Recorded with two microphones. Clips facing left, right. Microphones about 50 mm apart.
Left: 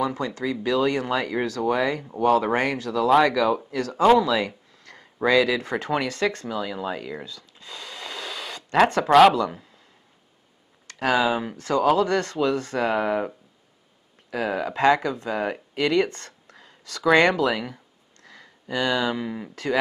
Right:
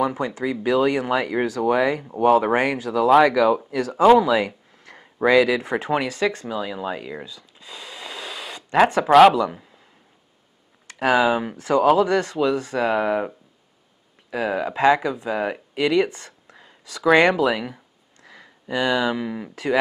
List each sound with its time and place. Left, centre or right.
0.0 s speech: centre
10.9 s speech: centre